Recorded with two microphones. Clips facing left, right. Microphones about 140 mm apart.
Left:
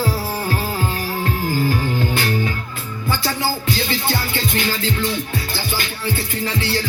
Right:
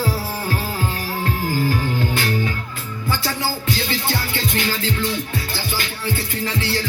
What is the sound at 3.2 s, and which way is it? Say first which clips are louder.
Music: left 2 dB; 20° left (ahead or behind).